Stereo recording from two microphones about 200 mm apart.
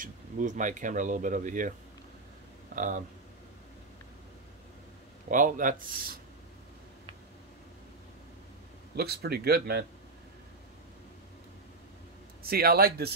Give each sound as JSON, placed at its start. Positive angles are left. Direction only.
{"t": 0.0, "sound": "speech", "side_deg": -40}
{"t": 2.7, "sound": "speech", "side_deg": -40}
{"t": 5.3, "sound": "speech", "side_deg": -40}
{"t": 8.9, "sound": "speech", "side_deg": -55}
{"t": 12.4, "sound": "speech", "side_deg": -50}